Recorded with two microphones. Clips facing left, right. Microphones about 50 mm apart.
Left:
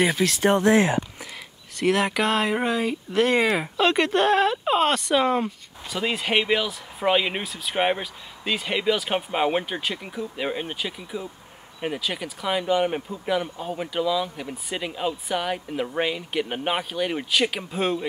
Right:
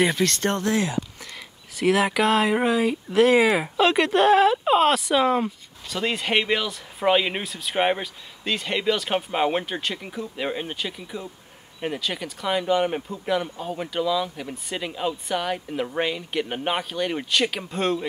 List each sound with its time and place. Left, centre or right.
0.0 s speech: centre
0.7 s speech: left
1.8 s speech: centre